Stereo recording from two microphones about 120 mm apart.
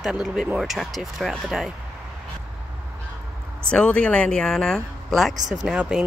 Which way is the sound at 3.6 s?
10° left (ahead or behind).